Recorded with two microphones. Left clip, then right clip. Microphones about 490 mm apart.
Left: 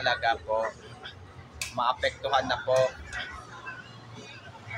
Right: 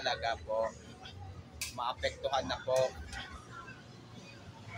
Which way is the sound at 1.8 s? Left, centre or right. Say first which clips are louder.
Left 9 dB; right.